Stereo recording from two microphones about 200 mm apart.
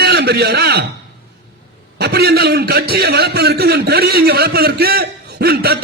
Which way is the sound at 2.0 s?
55° right (ahead or behind).